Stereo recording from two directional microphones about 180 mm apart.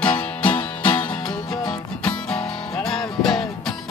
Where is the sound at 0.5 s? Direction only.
25° left (ahead or behind).